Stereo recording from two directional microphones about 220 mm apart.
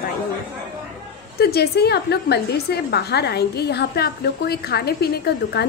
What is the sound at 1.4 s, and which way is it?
A woman's voice, 45° left (ahead or behind).